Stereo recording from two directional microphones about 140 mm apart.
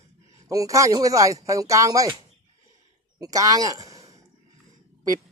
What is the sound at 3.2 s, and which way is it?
Speech, 25° right (ahead or behind).